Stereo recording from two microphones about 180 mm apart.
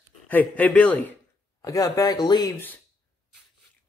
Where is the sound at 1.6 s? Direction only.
20° left (ahead or behind).